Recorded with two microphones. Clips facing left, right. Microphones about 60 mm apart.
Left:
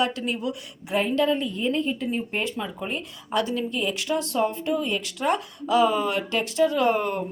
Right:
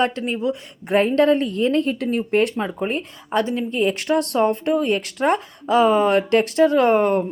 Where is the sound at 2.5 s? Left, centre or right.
Right.